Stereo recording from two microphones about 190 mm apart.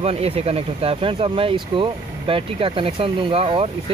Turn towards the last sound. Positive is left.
turn(degrees=-30)  # may be behind; listen again after turning